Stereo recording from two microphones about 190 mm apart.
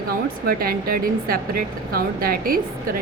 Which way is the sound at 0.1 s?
50° right (ahead or behind).